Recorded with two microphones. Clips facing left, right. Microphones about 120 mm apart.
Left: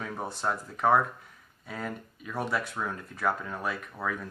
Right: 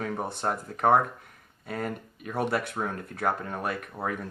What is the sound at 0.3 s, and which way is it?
Speech, 60° right (ahead or behind).